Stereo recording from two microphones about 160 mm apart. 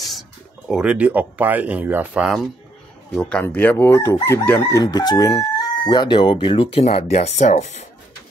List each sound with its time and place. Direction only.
0.7 s speech: 5° right (ahead or behind)
3.2 s speech: 10° left (ahead or behind); by 7.8 s 45° left (ahead or behind)